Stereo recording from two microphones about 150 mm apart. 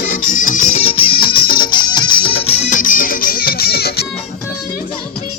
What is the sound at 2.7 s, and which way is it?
Music, 65° left (ahead or behind).